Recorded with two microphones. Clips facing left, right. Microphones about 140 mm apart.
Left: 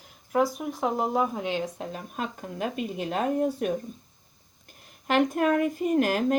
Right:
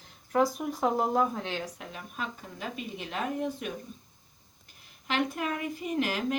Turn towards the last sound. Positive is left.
turn(degrees=50)  # may be behind; listen again after turning